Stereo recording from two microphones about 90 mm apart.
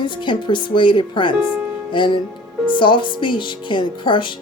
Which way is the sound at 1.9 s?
60° left (ahead or behind).